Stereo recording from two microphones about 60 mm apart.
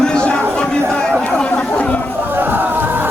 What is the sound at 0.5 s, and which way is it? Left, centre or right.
Chatter, centre.